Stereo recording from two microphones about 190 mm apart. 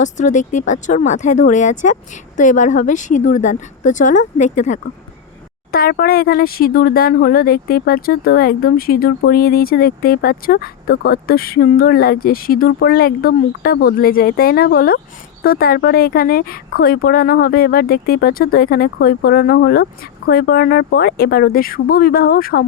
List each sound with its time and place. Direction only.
0.0 s speech: 40° left (ahead or behind)
5.7 s speech: 50° left (ahead or behind)